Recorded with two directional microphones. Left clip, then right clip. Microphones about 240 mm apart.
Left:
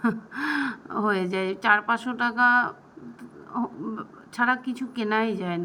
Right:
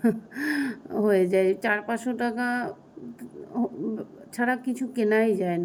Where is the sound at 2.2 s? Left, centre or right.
Left.